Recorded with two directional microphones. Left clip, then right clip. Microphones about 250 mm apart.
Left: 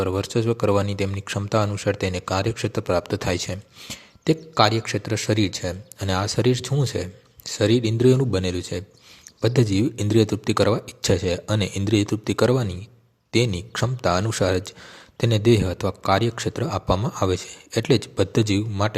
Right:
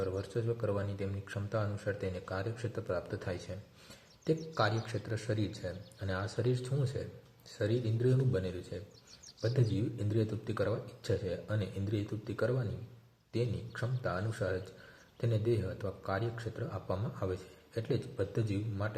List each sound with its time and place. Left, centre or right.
0.0 s speech: left